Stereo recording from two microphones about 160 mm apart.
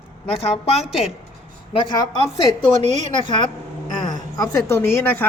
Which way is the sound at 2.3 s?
30° left (ahead or behind).